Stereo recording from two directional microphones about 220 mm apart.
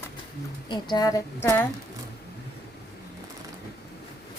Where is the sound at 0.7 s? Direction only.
20° left (ahead or behind).